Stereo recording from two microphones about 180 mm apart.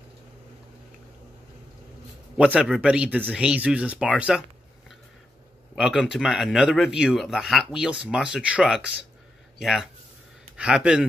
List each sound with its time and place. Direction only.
2.3 s a man's voice: 5° right (ahead or behind)
5.8 s a man's voice: 5° right (ahead or behind)